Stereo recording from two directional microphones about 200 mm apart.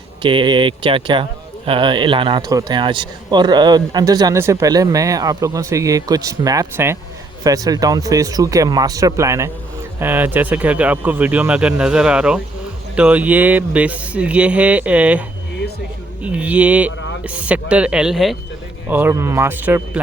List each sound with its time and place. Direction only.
0.2 s speech: 25° right (ahead or behind); by 15.2 s 5° right (ahead or behind)
16.2 s speech: 5° right (ahead or behind)